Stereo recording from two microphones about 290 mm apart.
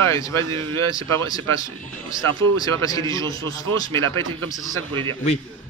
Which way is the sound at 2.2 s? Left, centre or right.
Right.